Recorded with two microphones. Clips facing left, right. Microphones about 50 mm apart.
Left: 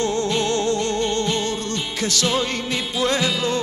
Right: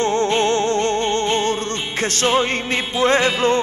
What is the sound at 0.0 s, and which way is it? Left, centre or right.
Music, right.